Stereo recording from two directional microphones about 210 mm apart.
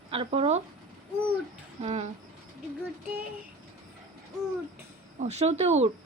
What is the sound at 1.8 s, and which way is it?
Speech, 35° right (ahead or behind).